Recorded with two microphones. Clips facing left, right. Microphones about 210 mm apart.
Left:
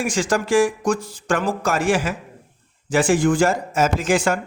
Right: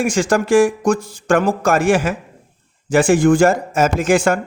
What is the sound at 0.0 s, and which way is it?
Speech, 50° right (ahead or behind).